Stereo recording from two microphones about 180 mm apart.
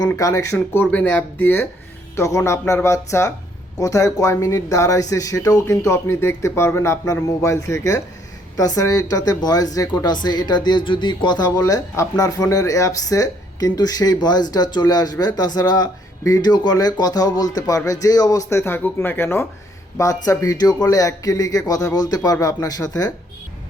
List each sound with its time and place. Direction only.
0.0 s speech: 20° left (ahead or behind)